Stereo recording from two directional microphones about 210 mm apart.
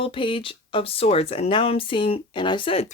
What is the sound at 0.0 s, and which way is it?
Speech, 25° left (ahead or behind).